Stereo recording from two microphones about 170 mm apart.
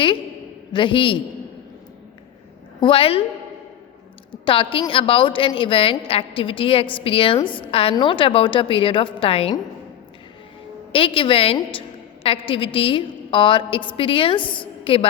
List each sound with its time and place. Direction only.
0.7 s a man's voice: 30° left (ahead or behind)
2.8 s a woman's voice: 30° left (ahead or behind)
4.4 s a woman's voice: 30° left (ahead or behind)
10.9 s a woman's voice: 30° left (ahead or behind)